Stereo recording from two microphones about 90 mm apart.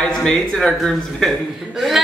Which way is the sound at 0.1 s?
10° left (ahead or behind).